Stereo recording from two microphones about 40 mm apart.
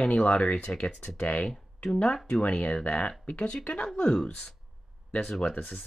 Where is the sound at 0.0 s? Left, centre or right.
Left.